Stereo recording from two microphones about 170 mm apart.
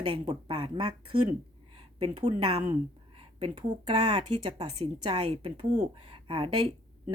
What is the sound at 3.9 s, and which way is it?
A woman's voice, 40° right (ahead or behind).